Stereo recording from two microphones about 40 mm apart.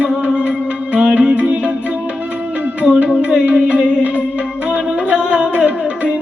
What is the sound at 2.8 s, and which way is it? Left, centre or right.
Music, right.